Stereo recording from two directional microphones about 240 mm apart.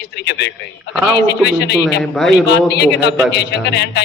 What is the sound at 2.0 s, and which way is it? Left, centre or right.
Speech, centre.